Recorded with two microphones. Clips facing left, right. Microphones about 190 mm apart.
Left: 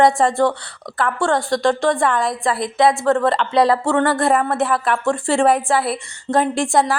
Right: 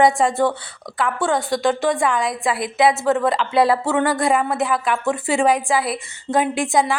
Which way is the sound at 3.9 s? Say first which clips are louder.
Left 2 dB; 15° right (ahead or behind).